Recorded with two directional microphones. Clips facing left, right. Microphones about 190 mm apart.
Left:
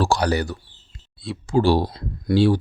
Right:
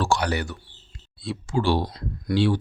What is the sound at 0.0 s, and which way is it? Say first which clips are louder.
Speech: left 4 dB; 35° left (ahead or behind).